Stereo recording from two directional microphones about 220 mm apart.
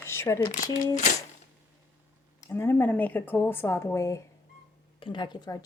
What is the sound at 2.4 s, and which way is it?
Speech, 10° left (ahead or behind).